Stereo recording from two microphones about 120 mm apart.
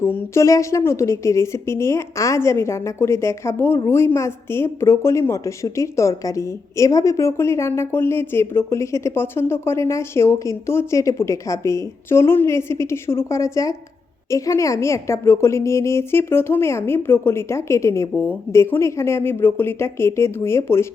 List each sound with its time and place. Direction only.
0.0 s a woman's voice: 20° left (ahead or behind)